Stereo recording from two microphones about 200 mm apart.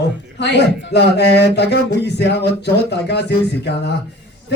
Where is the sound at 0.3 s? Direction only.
60° left (ahead or behind).